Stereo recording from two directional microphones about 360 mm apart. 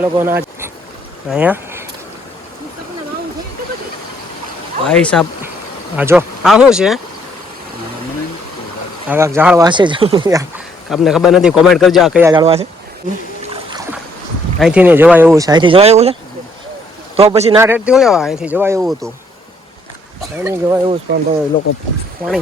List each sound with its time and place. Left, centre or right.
0.0 s speech: centre
4.9 s a man's voice: centre
9.0 s speech: centre
10.8 s a man's voice: centre
13.5 s boat: centre
14.6 s speech: centre
17.2 s a man's voice: centre
20.4 s speech: centre
21.1 s speech: right